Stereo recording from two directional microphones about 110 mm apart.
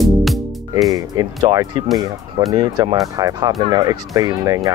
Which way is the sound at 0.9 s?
35° right (ahead or behind).